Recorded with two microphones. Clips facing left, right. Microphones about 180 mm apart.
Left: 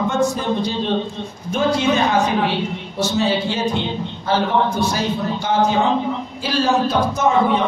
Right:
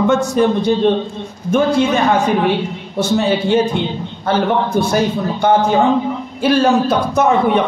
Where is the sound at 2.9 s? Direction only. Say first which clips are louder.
Right 4 dB; 55° right (ahead or behind).